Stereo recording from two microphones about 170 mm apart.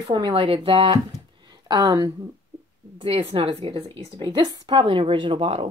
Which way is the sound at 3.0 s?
35° right (ahead or behind).